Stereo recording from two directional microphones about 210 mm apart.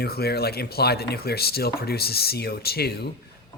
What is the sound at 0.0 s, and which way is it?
A man's voice, 50° left (ahead or behind).